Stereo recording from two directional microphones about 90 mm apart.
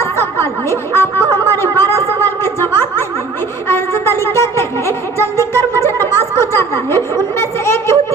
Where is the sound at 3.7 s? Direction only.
25° left (ahead or behind).